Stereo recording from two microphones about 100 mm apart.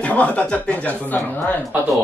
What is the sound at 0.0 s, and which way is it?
Speech, 15° left (ahead or behind).